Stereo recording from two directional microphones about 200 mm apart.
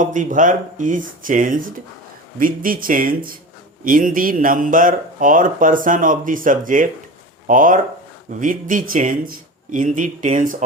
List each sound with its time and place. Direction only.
0.0 s speech: 40° right (ahead or behind)